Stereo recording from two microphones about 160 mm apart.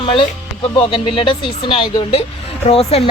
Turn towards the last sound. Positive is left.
turn(degrees=40)  # may be behind; listen again after turning